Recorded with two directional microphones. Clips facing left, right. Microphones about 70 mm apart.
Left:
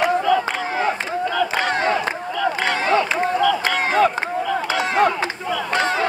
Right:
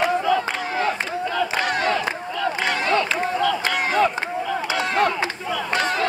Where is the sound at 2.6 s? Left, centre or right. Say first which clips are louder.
Left 2 dB; left.